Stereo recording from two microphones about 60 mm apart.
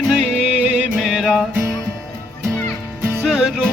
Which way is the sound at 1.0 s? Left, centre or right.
Centre.